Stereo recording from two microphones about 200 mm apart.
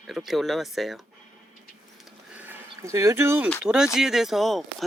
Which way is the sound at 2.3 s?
10° right (ahead or behind).